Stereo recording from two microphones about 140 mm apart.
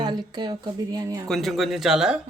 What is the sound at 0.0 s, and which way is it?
A woman's voice, 30° right (ahead or behind).